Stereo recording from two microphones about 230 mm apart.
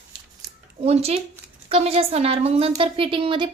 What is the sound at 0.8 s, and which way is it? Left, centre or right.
A woman's voice, right.